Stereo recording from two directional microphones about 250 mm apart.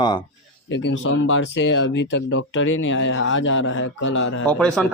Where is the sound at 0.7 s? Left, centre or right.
Left.